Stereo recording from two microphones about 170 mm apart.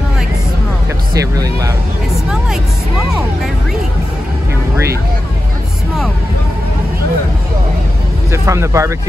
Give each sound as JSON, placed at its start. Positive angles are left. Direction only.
{"t": 1.1, "sound": "speech", "side_deg": -20}
{"t": 8.3, "sound": "speech", "side_deg": -15}